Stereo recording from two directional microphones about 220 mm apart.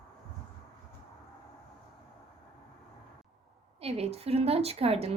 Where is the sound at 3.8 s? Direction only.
25° right (ahead or behind).